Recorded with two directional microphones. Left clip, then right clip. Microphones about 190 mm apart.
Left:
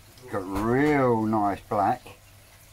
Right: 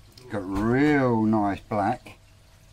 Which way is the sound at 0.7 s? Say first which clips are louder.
Even; 25° right (ahead or behind).